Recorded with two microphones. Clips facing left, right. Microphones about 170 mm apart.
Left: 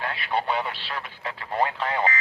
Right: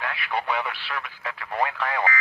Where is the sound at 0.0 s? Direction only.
30° left (ahead or behind).